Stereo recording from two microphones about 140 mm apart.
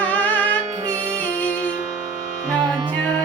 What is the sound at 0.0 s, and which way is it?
Music, 10° left (ahead or behind).